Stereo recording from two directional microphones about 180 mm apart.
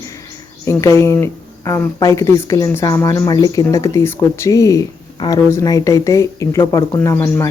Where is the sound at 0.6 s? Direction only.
15° left (ahead or behind).